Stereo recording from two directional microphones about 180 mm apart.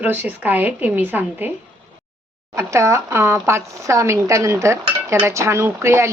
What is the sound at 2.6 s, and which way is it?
Speech, 15° right (ahead or behind).